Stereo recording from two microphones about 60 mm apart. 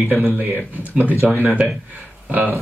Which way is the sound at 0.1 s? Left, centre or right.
Right.